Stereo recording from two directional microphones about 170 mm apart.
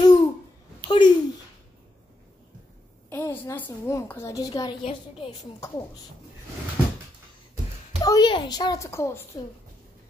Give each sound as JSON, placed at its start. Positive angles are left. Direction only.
{"t": 0.0, "sound": "babbling", "side_deg": 20}
{"t": 0.8, "sound": "a child's voice", "side_deg": 25}
{"t": 3.1, "sound": "a woman's voice", "side_deg": 15}
{"t": 8.0, "sound": "a woman's voice", "side_deg": 25}